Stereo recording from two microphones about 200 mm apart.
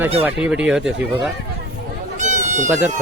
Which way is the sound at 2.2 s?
35° right (ahead or behind).